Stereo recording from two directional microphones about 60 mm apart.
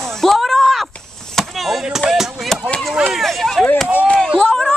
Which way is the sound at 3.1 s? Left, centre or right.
Centre.